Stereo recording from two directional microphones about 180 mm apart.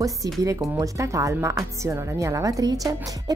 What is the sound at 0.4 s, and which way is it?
Speech, 20° right (ahead or behind).